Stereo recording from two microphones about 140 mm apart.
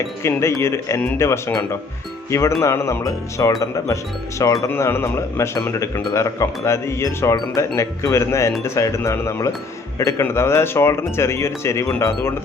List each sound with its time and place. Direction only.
0.2 s speech: 20° left (ahead or behind)